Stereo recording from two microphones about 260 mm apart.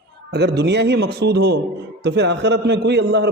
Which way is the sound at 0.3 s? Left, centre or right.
Right.